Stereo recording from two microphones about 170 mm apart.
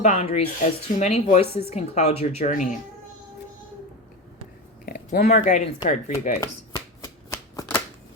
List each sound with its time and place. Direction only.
0.0 s speech: 40° left (ahead or behind)
2.4 s speech: 50° left (ahead or behind)
4.9 s a sound: 60° left (ahead or behind)
5.2 s speech: 45° left (ahead or behind)
7.0 s shuffling cards: 20° left (ahead or behind)